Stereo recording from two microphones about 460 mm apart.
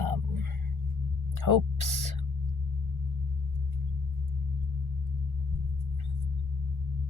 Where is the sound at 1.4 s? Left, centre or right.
Right.